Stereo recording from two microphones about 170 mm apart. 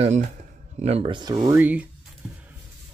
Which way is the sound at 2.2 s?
5° right (ahead or behind).